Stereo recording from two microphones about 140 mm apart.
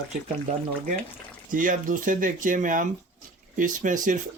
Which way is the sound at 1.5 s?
70° right (ahead or behind).